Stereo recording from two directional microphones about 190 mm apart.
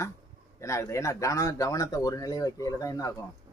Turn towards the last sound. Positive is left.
turn(degrees=20)  # may be behind; listen again after turning